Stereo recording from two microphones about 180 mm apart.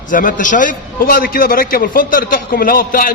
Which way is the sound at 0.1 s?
45° left (ahead or behind).